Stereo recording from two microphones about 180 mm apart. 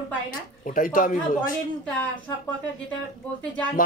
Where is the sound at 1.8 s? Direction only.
5° left (ahead or behind).